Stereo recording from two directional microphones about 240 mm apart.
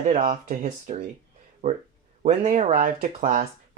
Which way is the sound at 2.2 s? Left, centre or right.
Right.